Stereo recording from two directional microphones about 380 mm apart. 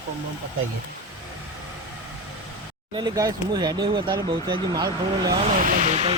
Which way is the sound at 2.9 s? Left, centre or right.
Centre.